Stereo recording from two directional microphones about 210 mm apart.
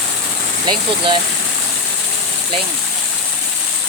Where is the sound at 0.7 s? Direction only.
20° right (ahead or behind).